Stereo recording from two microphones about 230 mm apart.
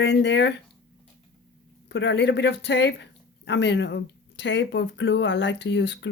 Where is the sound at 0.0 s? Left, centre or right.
Left.